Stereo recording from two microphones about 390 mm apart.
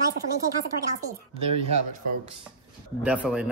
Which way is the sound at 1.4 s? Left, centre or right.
Centre.